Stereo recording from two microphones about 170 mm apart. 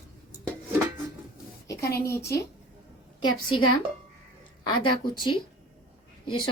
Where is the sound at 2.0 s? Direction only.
15° left (ahead or behind).